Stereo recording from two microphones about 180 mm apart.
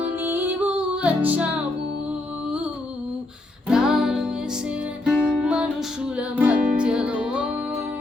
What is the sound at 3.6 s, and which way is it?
Music, 5° right (ahead or behind).